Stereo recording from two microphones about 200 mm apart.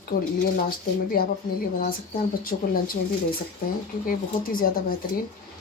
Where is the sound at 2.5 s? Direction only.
45° left (ahead or behind).